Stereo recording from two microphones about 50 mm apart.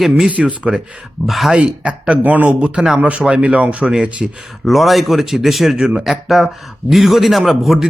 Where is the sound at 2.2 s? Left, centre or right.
Right.